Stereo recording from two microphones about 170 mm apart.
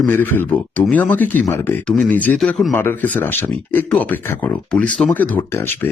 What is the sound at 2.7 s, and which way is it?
Speech, 15° left (ahead or behind).